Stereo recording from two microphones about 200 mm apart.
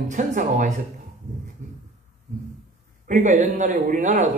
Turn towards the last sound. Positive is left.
turn(degrees=-35)  # may be behind; listen again after turning